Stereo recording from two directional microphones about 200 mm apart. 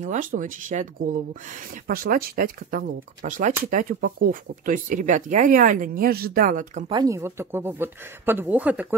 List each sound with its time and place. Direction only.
0.0 s speech: 40° right (ahead or behind)
6.9 s speech: 20° right (ahead or behind)